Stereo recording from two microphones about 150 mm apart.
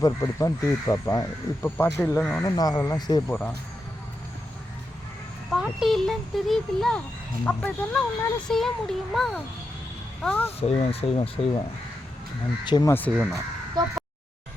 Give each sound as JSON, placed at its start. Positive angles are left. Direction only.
{"t": 0.0, "sound": "speech", "side_deg": 20}
{"t": 2.4, "sound": "speech", "side_deg": 25}
{"t": 5.5, "sound": "a child's voice", "side_deg": -5}
{"t": 10.2, "sound": "speech", "side_deg": 15}
{"t": 10.6, "sound": "speech", "side_deg": 40}
{"t": 12.6, "sound": "speech", "side_deg": 30}
{"t": 12.9, "sound": "speech", "side_deg": 10}
{"t": 13.8, "sound": "speech", "side_deg": -25}